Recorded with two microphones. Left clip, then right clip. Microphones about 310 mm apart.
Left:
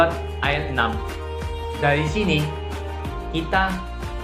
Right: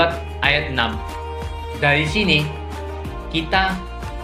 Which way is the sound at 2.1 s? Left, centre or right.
Right.